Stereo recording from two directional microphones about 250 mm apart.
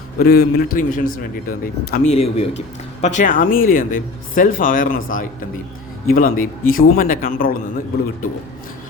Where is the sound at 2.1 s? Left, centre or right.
Left.